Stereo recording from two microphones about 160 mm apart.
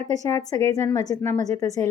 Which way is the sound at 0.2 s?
20° left (ahead or behind).